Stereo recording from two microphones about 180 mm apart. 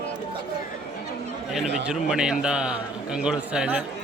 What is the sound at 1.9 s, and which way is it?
A man's voice, 5° right (ahead or behind).